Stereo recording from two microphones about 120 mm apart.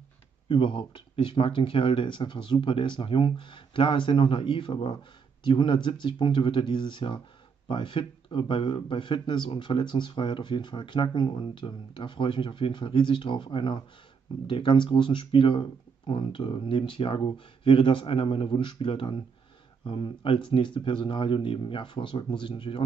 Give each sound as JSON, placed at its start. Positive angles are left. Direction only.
{"t": 0.5, "sound": "speech", "side_deg": 45}